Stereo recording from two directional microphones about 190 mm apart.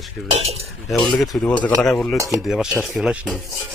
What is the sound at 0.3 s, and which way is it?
Cutlery, 35° right (ahead or behind).